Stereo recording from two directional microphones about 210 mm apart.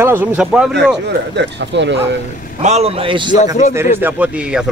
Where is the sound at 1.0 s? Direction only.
55° right (ahead or behind).